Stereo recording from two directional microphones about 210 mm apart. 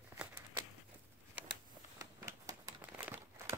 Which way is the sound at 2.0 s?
15° right (ahead or behind).